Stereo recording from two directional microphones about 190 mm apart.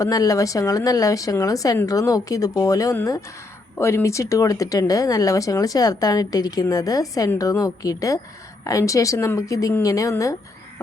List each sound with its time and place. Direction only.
0.0 s speech: 20° left (ahead or behind)